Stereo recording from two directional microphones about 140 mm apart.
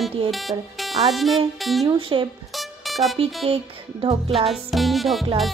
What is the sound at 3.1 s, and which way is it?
Music, 45° right (ahead or behind).